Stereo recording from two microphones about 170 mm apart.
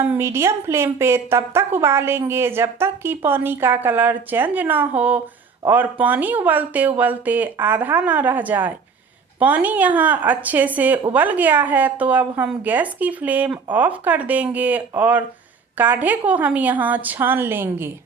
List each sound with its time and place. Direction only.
0.1 s a woman's voice: 15° right (ahead or behind)